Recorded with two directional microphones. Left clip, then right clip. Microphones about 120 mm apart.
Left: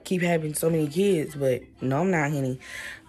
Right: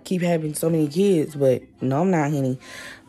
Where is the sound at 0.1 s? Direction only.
20° right (ahead or behind).